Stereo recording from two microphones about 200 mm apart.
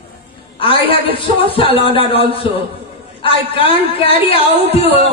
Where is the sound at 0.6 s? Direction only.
25° left (ahead or behind).